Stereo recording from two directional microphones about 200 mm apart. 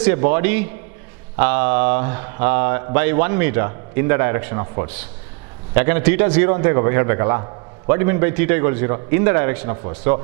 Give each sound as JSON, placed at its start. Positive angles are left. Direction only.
{"t": 0.0, "sound": "a man's voice", "side_deg": -15}